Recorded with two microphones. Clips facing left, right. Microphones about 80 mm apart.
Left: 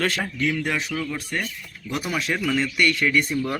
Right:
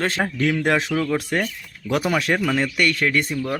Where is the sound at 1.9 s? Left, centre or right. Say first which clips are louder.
Right 6 dB; right.